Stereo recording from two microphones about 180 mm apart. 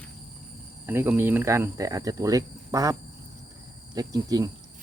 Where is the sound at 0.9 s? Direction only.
10° right (ahead or behind).